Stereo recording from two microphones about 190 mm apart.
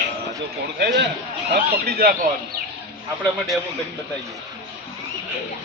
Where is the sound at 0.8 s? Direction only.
60° right (ahead or behind).